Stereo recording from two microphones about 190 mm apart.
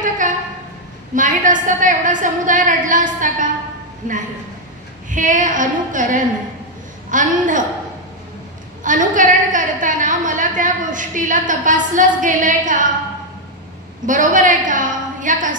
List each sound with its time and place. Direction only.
1.1 s a woman's voice: 45° right (ahead or behind)
8.8 s a woman's voice: 45° right (ahead or behind)
14.0 s a woman's voice: 40° right (ahead or behind)